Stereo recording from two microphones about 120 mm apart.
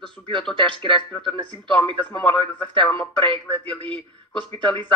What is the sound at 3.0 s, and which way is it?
A man's voice, 45° right (ahead or behind).